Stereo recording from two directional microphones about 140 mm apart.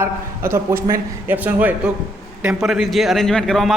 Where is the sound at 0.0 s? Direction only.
20° right (ahead or behind).